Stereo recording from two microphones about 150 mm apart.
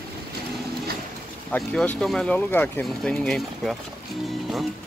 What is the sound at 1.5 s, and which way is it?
Speech, 5° left (ahead or behind).